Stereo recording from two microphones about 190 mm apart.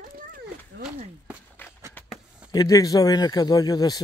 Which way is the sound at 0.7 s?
60° right (ahead or behind).